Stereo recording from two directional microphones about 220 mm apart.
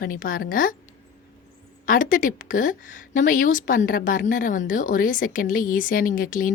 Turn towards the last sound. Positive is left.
turn(degrees=40)  # may be behind; listen again after turning